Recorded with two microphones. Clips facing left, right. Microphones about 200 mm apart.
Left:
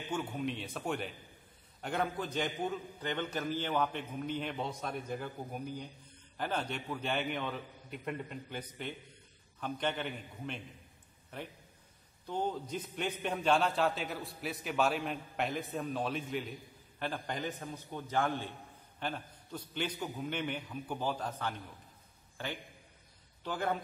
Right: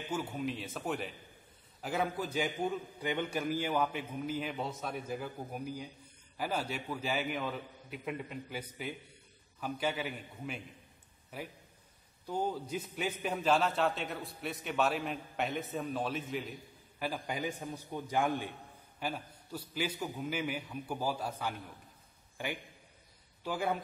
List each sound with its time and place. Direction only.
0.1 s a man's voice: 5° right (ahead or behind)